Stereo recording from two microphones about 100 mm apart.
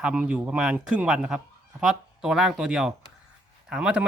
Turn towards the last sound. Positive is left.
turn(degrees=-10)  # may be behind; listen again after turning